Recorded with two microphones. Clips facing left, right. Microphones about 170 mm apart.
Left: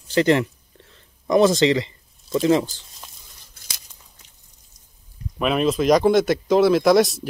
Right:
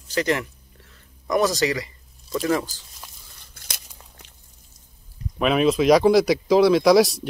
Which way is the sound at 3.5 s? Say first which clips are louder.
Right 3 dB; 60° right (ahead or behind).